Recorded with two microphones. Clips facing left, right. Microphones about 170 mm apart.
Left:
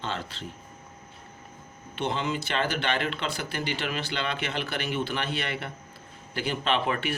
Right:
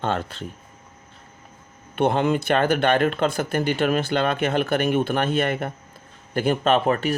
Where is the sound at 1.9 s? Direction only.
55° right (ahead or behind).